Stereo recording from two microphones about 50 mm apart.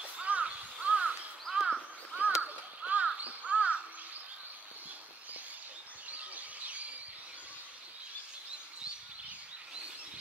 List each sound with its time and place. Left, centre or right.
0.0 s crow: right
1.5 s crow: centre
2.1 s a sound: right
3.2 s crow: right
6.0 s bird: right